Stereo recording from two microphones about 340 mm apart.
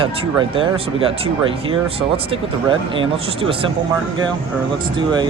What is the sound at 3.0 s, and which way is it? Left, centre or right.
Speech, centre.